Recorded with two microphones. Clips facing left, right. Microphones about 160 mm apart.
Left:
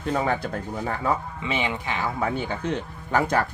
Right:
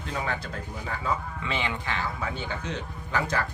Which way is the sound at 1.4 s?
20° left (ahead or behind).